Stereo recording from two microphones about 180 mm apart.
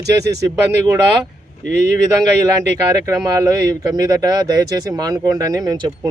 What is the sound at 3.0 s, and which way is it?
A man's voice, 15° right (ahead or behind).